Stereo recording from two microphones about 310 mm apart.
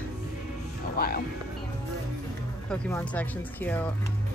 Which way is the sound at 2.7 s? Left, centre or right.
Centre.